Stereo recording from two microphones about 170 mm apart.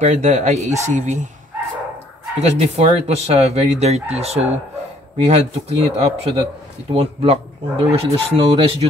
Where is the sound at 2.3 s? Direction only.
40° right (ahead or behind).